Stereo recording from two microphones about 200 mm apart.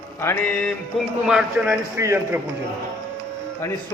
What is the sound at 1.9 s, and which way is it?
Speech, 15° right (ahead or behind).